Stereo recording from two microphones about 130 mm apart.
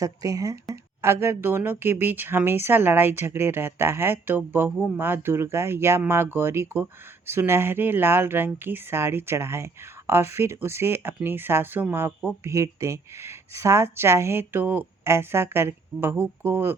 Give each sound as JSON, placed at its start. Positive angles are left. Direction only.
{"t": 0.0, "sound": "speech", "side_deg": -25}